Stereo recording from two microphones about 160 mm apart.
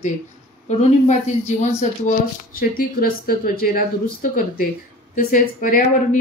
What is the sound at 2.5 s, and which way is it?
Speech, 65° left (ahead or behind).